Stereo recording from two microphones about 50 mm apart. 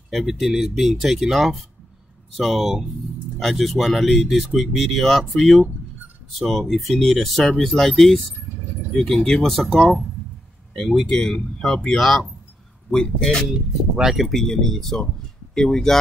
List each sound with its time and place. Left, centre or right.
0.1 s speech: centre
11.1 s speech: centre
13.5 s speech: centre
14.1 s speech: centre
14.4 s speech: centre